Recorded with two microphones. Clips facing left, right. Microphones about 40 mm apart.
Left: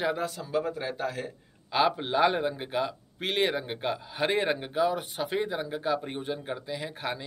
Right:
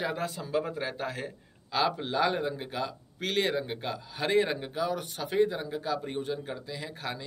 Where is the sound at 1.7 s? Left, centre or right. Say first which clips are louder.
Left 3 dB; centre.